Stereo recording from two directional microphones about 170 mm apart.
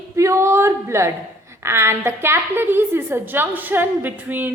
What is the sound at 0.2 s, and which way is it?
A woman's voice, 15° right (ahead or behind).